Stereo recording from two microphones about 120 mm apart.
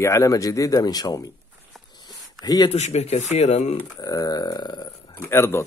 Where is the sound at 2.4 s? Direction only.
30° left (ahead or behind).